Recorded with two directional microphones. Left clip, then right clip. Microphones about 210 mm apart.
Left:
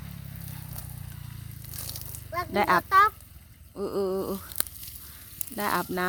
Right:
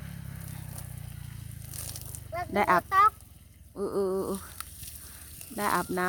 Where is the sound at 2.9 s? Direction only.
40° left (ahead or behind).